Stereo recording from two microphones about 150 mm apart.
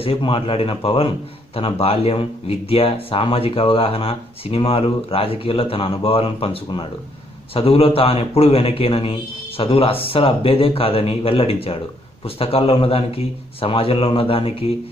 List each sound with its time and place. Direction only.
0.0 s a man's voice: 35° left (ahead or behind)